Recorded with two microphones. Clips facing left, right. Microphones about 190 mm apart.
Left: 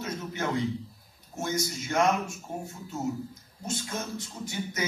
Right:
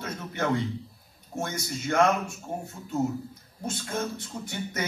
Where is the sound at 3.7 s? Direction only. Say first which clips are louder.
Right 3 dB; 60° right (ahead or behind).